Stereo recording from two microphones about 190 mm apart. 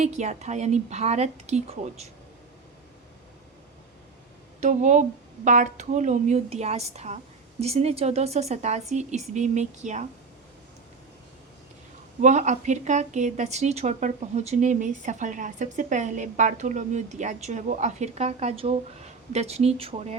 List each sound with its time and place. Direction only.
0.0 s a woman's voice: 35° right (ahead or behind)
4.6 s a woman's voice: 40° right (ahead or behind)
12.2 s a woman's voice: 40° right (ahead or behind)